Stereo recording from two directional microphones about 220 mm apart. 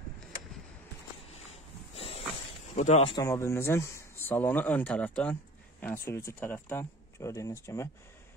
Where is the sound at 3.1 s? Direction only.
15° left (ahead or behind).